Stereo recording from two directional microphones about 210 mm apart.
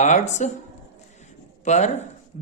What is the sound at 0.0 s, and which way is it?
Speech, 35° left (ahead or behind).